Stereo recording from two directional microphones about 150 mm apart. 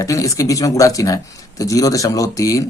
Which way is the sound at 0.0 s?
20° left (ahead or behind).